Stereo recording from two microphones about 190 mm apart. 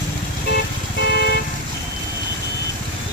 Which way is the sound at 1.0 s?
60° left (ahead or behind).